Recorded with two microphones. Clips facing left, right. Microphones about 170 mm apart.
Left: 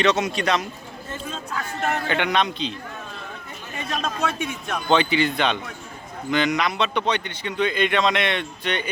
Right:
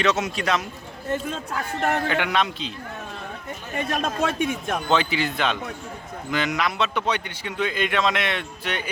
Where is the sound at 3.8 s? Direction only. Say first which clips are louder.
Right 2 dB; 55° right (ahead or behind).